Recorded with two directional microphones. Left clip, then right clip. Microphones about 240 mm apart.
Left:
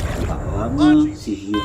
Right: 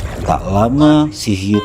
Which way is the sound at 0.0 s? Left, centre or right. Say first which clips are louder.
Even; centre.